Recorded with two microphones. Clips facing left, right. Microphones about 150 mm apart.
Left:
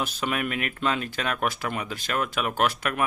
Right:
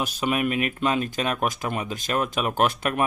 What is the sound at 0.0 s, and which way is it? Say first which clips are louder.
Speech: right 4 dB; 15° right (ahead or behind).